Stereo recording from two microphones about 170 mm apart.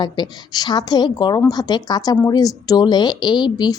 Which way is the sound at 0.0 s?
25° left (ahead or behind).